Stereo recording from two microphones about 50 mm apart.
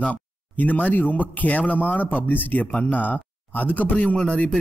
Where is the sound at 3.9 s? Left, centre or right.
Left.